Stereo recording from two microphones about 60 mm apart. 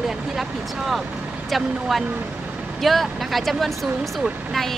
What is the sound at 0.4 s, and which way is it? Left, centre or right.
Speech, centre.